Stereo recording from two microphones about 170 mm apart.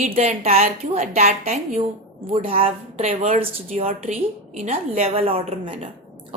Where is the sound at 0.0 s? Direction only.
40° right (ahead or behind).